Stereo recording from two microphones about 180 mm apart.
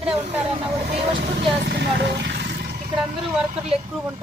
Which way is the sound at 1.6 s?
70° right (ahead or behind).